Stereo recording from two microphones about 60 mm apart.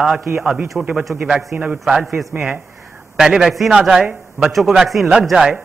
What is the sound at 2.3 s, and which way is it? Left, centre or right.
Speech, right.